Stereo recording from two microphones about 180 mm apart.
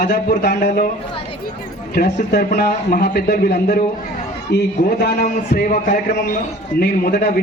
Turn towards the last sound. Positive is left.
turn(degrees=60)  # may be behind; listen again after turning